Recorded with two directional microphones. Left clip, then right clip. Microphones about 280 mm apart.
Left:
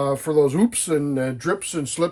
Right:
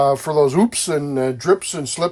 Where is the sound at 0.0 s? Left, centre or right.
Centre.